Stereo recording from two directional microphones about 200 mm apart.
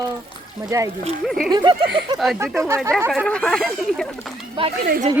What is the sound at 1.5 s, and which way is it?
Speech, 20° right (ahead or behind).